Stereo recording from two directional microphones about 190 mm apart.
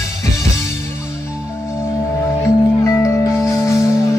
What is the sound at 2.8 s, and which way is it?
Music, 15° left (ahead or behind).